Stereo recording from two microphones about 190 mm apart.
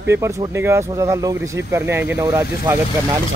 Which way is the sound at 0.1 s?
15° right (ahead or behind).